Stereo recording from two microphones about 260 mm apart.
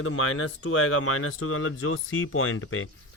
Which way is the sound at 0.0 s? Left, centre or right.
Left.